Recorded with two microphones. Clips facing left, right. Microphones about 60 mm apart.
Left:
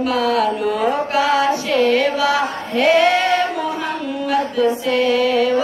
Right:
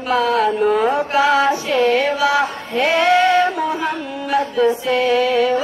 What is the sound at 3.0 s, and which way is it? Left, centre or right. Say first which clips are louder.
Female singing: right 2 dB; centre.